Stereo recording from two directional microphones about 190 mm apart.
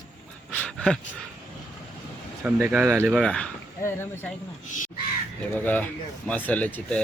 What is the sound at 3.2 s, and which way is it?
Speech, 5° left (ahead or behind).